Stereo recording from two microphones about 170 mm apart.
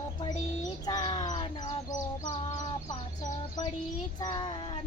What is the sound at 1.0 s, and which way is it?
Bird, 40° left (ahead or behind).